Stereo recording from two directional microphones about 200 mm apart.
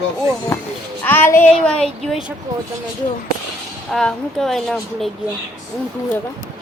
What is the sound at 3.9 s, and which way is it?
A woman's voice, centre (ahead or behind).